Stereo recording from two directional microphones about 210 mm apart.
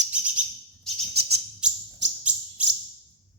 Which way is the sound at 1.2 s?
50° right (ahead or behind).